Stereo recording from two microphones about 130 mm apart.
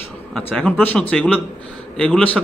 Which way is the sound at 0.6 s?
10° left (ahead or behind).